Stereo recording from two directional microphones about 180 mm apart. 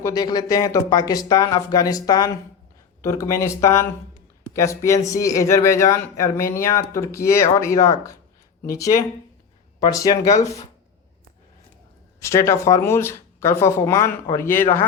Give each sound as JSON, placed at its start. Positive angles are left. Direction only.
{"t": 0.0, "sound": "speech", "side_deg": 20}
{"t": 12.2, "sound": "speech", "side_deg": 15}